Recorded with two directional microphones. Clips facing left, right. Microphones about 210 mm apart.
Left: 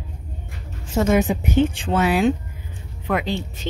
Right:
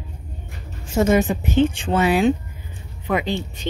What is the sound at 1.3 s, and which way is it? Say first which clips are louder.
Speech: right 1 dB; 10° left (ahead or behind).